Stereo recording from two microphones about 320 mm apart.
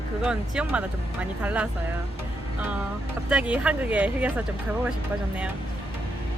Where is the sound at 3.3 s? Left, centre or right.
Centre.